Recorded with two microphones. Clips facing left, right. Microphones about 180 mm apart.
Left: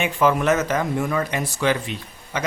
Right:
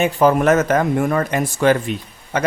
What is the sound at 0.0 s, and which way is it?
A man's voice, 40° right (ahead or behind).